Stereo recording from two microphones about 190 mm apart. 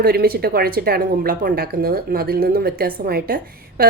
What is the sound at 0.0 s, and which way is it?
A woman's voice, 55° right (ahead or behind).